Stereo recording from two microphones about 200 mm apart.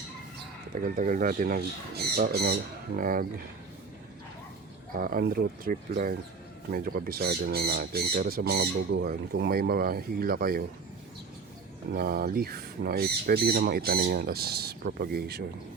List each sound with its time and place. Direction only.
0.7 s speech: 40° right (ahead or behind)
4.9 s speech: 45° right (ahead or behind)
11.9 s speech: 50° right (ahead or behind)